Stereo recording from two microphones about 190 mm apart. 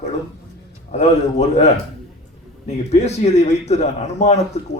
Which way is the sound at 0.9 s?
35° left (ahead or behind).